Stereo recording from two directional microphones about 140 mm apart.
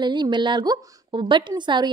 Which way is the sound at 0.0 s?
30° right (ahead or behind).